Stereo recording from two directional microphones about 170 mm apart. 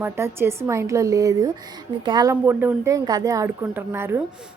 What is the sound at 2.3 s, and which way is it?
A woman's voice, 10° right (ahead or behind).